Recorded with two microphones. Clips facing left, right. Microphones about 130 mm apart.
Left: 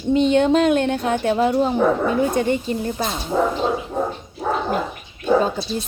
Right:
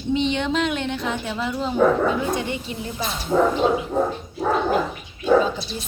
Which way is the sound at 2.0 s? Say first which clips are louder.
Left 2 dB; centre (ahead or behind).